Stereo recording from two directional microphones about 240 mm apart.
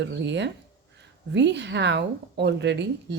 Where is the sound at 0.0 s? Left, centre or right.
Right.